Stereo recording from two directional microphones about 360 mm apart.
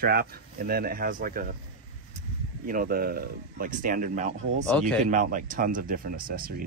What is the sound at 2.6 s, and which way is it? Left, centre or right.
Speech, right.